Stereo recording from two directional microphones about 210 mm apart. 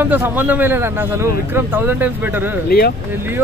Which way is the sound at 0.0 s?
10° right (ahead or behind).